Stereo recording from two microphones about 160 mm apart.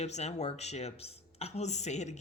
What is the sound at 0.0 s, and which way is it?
A woman's voice, 45° left (ahead or behind).